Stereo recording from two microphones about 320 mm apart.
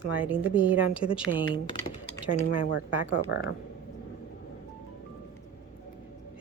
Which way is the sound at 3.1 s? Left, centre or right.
Left.